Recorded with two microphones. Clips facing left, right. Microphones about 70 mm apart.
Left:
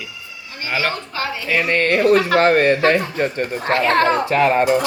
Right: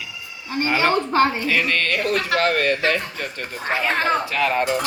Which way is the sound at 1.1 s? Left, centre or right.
Right.